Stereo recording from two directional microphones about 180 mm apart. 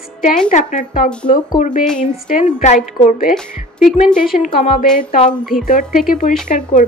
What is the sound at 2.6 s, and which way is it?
Speech, 45° left (ahead or behind).